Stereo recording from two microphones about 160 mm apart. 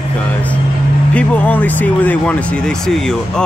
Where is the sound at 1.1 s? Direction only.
10° left (ahead or behind).